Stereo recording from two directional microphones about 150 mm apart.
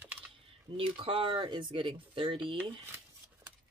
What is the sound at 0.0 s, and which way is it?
Typing, 10° right (ahead or behind).